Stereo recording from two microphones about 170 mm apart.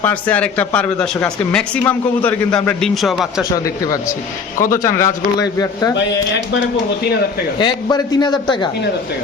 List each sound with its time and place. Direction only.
0.0 s a man's voice: 10° left (ahead or behind)
4.7 s a man's voice: 15° left (ahead or behind)
5.9 s speech: 90° left
7.6 s a man's voice: 25° left (ahead or behind)